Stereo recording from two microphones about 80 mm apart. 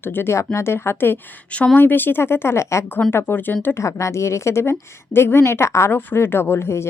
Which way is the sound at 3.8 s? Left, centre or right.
Left.